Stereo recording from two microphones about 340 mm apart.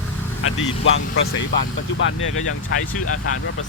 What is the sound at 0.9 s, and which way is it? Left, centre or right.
Speech, left.